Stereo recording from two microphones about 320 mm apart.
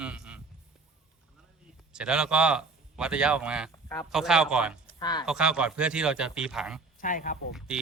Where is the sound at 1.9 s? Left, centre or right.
Centre.